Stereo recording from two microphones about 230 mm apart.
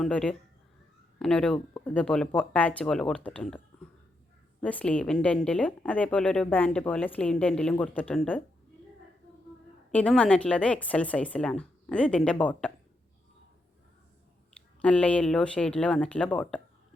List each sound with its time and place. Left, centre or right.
0.0 s a woman's voice: centre
4.6 s a woman's voice: centre
9.9 s a woman's voice: centre
14.8 s a woman's voice: centre